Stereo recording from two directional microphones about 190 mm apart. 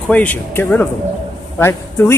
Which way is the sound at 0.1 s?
10° left (ahead or behind).